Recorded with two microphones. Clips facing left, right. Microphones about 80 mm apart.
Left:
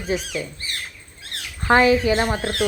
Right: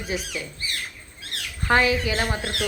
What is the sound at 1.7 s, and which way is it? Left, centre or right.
Speech, left.